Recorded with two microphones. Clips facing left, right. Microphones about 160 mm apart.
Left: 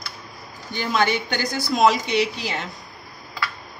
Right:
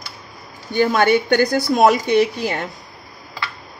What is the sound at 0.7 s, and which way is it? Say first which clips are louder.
Speech: right 7 dB; 55° right (ahead or behind).